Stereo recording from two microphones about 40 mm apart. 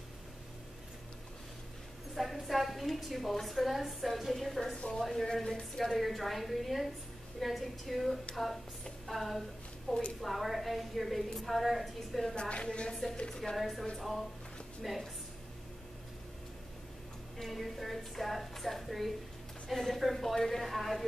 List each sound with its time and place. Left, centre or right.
2.1 s a woman's voice: centre
12.4 s a sound: left
13.6 s a woman's voice: centre
17.4 s a woman's voice: centre